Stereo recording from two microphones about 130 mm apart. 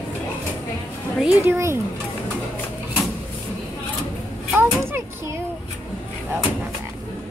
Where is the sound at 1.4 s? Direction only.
20° right (ahead or behind).